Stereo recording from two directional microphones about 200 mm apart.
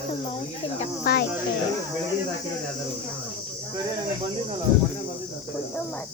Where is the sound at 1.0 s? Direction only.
50° left (ahead or behind).